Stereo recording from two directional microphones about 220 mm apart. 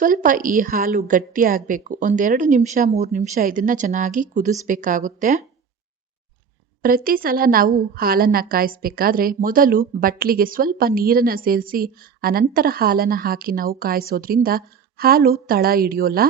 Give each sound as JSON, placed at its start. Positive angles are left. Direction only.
{"t": 0.0, "sound": "a woman's voice", "side_deg": -35}
{"t": 6.8, "sound": "a woman's voice", "side_deg": -40}